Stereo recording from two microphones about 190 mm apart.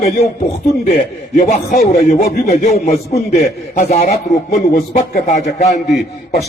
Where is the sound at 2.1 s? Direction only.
55° left (ahead or behind); by 4.0 s 40° left (ahead or behind).